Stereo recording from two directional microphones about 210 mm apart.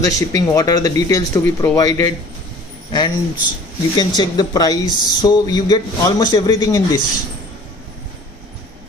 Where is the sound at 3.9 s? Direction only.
20° left (ahead or behind).